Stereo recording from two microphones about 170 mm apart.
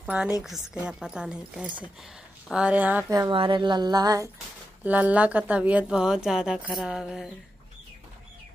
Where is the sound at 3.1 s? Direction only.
25° right (ahead or behind).